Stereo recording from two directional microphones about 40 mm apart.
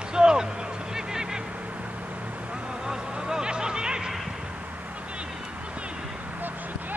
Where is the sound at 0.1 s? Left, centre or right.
Centre.